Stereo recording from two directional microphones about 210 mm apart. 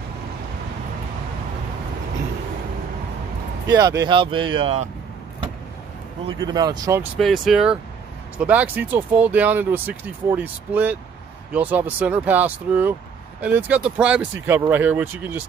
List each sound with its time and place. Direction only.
3.7 s speech: 15° right (ahead or behind)
6.2 s speech: 20° right (ahead or behind)
7.2 s speech: centre (ahead or behind)